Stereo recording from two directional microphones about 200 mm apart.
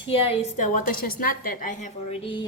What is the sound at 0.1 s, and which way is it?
A woman's voice, 30° left (ahead or behind).